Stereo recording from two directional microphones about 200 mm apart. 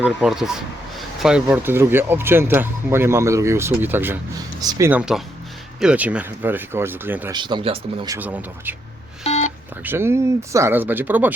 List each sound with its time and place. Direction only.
0.0 s speech: 5° right (ahead or behind); by 4.9 s 20° right (ahead or behind)
4.9 s speech: 5° right (ahead or behind)
7.3 s speech: 20° right (ahead or behind)
8.1 s speech: 10° right (ahead or behind)
9.2 s telephone dialing: 35° left (ahead or behind)
9.8 s speech: 10° right (ahead or behind)